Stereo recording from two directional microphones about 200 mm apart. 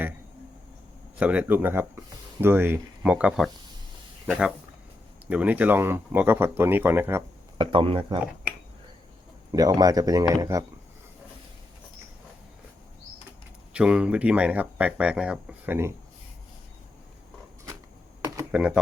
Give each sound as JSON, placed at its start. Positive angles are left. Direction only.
{"t": 1.2, "sound": "speech", "side_deg": -5}
{"t": 7.6, "sound": "speech", "side_deg": -25}
{"t": 9.5, "sound": "speech", "side_deg": -20}
{"t": 13.7, "sound": "speech", "side_deg": -5}
{"t": 18.5, "sound": "speech", "side_deg": -5}